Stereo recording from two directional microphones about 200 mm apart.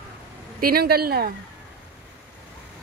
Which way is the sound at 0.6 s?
50° right (ahead or behind).